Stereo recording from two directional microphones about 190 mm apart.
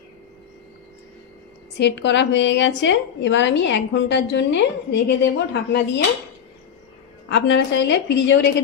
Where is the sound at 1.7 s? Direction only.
65° left (ahead or behind).